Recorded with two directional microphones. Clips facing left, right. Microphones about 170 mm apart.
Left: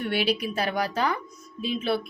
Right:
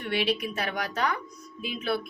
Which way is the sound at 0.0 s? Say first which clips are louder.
Left 2 dB; 35° left (ahead or behind).